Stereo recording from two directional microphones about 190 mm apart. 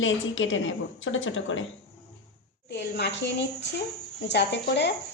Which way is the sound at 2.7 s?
65° left (ahead or behind).